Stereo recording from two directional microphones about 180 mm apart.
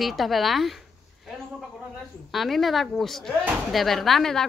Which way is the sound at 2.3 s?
Centre (ahead or behind).